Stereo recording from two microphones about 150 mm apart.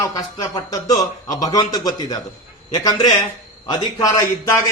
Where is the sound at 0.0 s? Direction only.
25° left (ahead or behind).